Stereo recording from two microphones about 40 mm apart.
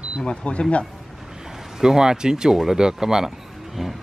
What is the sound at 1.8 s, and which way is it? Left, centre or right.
Speech, centre.